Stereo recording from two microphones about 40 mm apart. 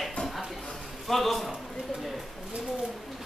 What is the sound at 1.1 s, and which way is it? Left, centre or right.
Speech, centre.